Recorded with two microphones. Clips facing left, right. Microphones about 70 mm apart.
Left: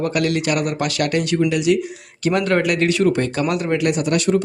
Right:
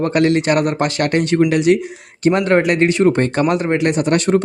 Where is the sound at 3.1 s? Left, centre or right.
Right.